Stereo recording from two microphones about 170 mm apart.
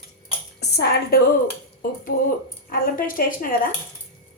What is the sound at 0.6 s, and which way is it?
Speech, 70° left (ahead or behind).